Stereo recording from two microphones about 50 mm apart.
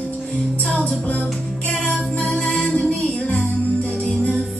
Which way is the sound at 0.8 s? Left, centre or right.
Left.